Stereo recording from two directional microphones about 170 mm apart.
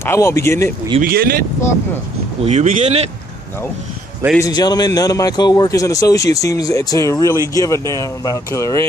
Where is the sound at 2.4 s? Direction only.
40° right (ahead or behind).